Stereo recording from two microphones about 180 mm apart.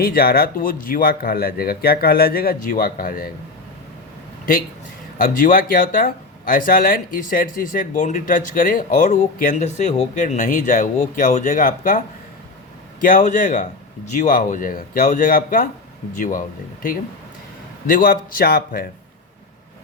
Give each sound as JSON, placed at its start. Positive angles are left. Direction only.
{"t": 0.0, "sound": "speech", "side_deg": 55}
{"t": 5.1, "sound": "speech", "side_deg": 50}